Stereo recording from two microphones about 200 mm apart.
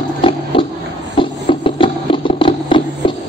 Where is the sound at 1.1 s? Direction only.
25° left (ahead or behind).